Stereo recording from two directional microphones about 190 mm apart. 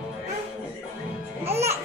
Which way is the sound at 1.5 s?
15° right (ahead or behind).